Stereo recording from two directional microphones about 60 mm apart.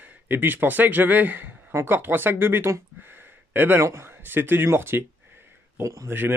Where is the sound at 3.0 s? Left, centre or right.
Right.